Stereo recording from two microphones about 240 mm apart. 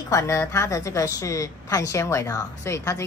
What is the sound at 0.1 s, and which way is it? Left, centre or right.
A woman's voice, centre.